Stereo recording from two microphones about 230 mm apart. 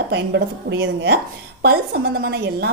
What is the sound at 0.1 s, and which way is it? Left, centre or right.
A woman's voice, right.